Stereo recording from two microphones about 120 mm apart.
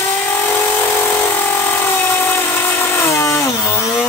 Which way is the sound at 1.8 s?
15° left (ahead or behind).